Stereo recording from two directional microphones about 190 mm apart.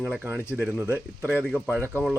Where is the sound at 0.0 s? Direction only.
5° right (ahead or behind).